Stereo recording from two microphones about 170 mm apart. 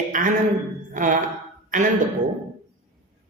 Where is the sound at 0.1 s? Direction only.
50° right (ahead or behind).